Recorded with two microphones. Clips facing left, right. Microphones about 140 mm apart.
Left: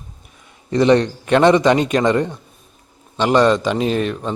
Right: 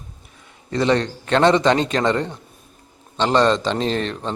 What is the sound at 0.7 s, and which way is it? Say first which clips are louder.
Speech: left 5 dB; 20° left (ahead or behind).